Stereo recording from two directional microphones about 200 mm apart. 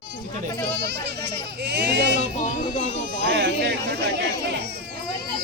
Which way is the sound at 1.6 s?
60° right (ahead or behind).